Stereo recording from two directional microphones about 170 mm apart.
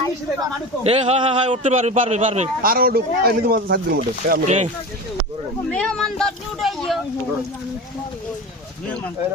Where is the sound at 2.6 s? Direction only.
60° right (ahead or behind).